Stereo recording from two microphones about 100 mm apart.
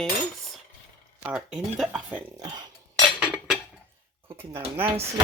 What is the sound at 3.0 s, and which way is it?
Cutlery, 5° right (ahead or behind).